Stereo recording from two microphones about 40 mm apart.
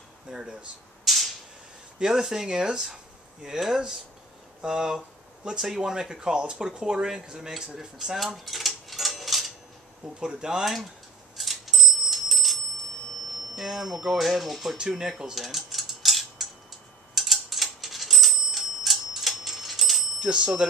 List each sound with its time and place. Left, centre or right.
0.3 s speech: centre
1.0 s a sound: centre
2.0 s speech: centre
2.5 s speech: right
8.5 s a sound: centre
10.2 s speech: centre
11.3 s clock: centre
13.6 s speech: centre
14.8 s speech: centre
15.3 s cutlery: centre
17.1 s clock: centre
20.2 s speech: right